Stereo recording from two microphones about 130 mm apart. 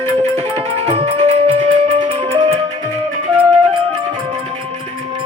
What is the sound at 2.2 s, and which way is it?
Music, 45° right (ahead or behind).